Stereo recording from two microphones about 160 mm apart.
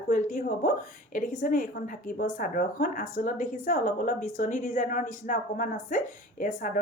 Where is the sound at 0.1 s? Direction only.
50° left (ahead or behind).